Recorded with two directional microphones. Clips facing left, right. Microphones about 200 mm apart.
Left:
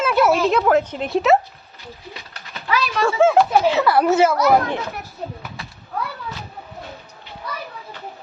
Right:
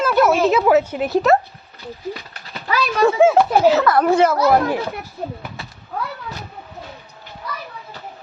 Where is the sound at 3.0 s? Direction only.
15° right (ahead or behind).